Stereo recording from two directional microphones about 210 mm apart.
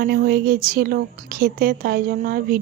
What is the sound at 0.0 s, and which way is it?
A woman's voice, 45° right (ahead or behind).